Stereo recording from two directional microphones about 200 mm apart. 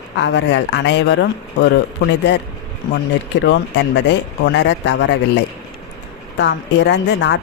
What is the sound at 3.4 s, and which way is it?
Speech, 60° left (ahead or behind).